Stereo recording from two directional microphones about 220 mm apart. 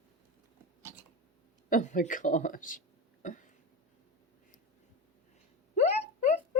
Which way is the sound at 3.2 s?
35° left (ahead or behind).